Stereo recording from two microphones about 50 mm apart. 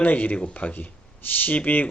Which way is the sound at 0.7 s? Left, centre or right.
Left.